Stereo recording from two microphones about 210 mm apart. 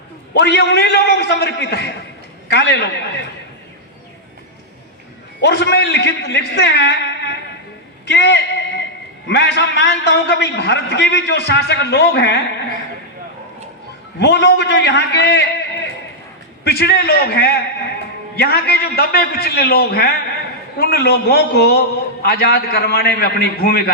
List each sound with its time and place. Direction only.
0.3 s a man's voice: 55° left (ahead or behind)
5.4 s a man's voice: 55° left (ahead or behind)
8.0 s a sound: 55° left (ahead or behind)
9.2 s a man's voice: 55° left (ahead or behind)
14.2 s a man's voice: 55° left (ahead or behind)